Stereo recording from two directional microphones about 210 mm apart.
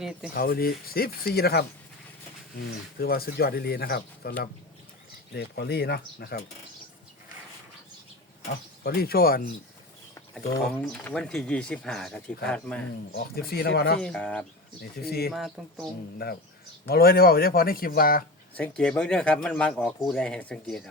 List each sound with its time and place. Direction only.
0.0 s speech: 5° right (ahead or behind)
0.3 s speech: 45° left (ahead or behind)
2.6 s speech: 45° left (ahead or behind)
8.8 s speech: 45° left (ahead or behind)
10.6 s speech: centre (ahead or behind)
13.1 s speech: 45° left (ahead or behind)
14.0 s speech: 5° left (ahead or behind)
16.2 s speech: 50° left (ahead or behind)
18.5 s speech: 5° left (ahead or behind)